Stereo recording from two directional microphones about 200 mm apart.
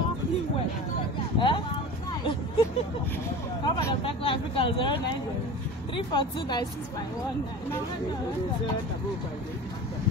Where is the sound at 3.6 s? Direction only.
20° left (ahead or behind).